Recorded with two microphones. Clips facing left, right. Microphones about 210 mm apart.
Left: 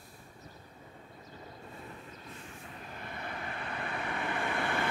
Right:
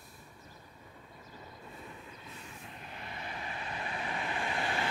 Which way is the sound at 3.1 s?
55° left (ahead or behind).